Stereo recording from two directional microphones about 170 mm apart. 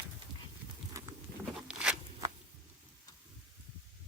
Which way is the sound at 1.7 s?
5° right (ahead or behind).